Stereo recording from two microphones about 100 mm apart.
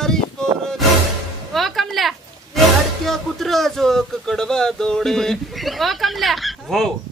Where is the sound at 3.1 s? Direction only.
Centre (ahead or behind).